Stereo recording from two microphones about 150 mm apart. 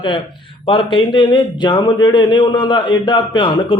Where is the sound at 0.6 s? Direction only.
35° left (ahead or behind).